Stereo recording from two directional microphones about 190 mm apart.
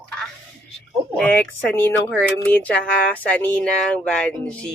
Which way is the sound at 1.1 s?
5° left (ahead or behind).